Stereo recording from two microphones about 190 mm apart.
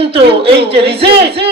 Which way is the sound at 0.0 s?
30° right (ahead or behind).